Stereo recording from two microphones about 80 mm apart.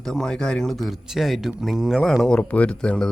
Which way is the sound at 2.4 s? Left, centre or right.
Centre.